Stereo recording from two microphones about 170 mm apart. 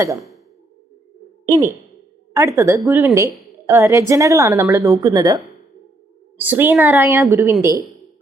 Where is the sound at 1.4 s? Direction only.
20° right (ahead or behind).